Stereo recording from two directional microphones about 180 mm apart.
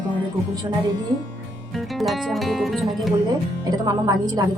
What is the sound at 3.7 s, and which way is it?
Speech, 20° right (ahead or behind).